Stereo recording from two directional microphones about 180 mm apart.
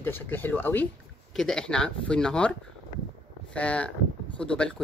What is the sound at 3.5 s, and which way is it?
Speech, 5° left (ahead or behind).